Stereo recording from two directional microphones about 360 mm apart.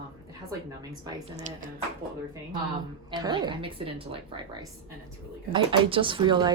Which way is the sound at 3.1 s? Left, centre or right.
Centre.